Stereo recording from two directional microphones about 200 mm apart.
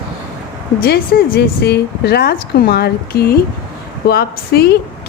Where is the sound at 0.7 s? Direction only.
50° left (ahead or behind).